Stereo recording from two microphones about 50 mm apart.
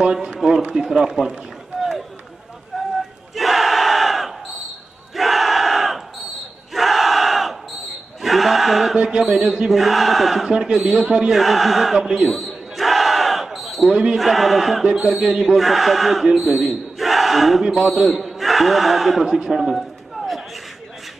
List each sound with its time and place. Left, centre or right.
0.0 s a man's voice: centre
2.7 s a sound: centre
3.3 s battle cry: centre
5.1 s crowd: centre
6.7 s battle cry: centre
8.9 s speech: centre
9.2 s a man's voice: centre
9.7 s chant: centre
10.5 s a man's voice: centre
11.3 s chant: centre
12.3 s battle cry: centre
14.1 s chant: centre
16.3 s speech: centre
19.7 s a sound: centre